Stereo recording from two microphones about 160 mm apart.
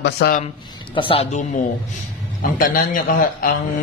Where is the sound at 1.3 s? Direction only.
50° left (ahead or behind).